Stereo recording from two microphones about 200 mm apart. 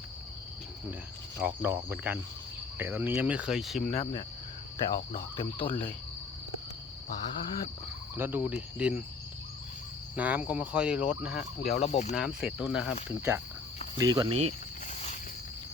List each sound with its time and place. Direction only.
1.4 s speech: 10° right (ahead or behind)
3.8 s speech: 35° left (ahead or behind)
5.4 s speech: 25° left (ahead or behind)
8.1 s speech: 10° right (ahead or behind)
10.2 s speech: 5° right (ahead or behind)
11.7 s speech: 35° left (ahead or behind)
12.1 s speech: 5° right (ahead or behind); by 14.5 s 30° right (ahead or behind)